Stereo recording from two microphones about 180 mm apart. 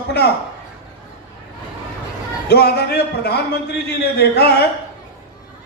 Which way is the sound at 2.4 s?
65° left (ahead or behind).